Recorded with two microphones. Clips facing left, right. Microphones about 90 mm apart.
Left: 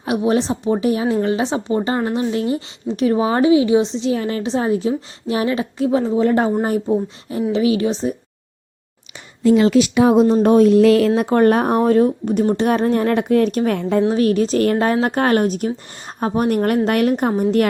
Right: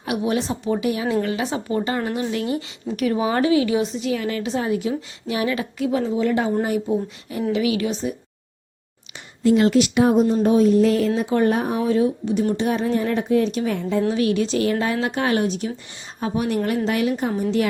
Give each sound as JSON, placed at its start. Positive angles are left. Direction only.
{"t": 0.0, "sound": "a woman's voice", "side_deg": 30}
{"t": 6.8, "sound": "a woman's voice", "side_deg": 30}
{"t": 10.4, "sound": "speech", "side_deg": 70}
{"t": 14.1, "sound": "a woman's voice", "side_deg": 40}